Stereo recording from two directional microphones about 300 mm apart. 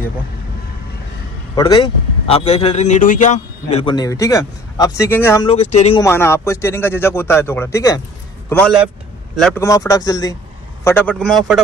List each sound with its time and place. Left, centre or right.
1.5 s a man's voice: centre
5.5 s speech: left
6.0 s a man's voice: centre